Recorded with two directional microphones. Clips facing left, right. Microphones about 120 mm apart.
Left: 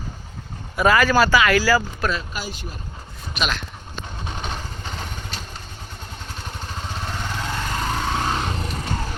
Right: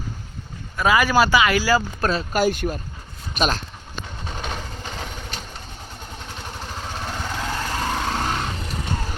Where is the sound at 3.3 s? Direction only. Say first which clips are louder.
Right 4 dB; 40° right (ahead or behind).